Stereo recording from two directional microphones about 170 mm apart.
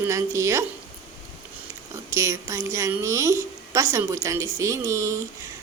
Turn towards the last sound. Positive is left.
turn(degrees=-15)  # may be behind; listen again after turning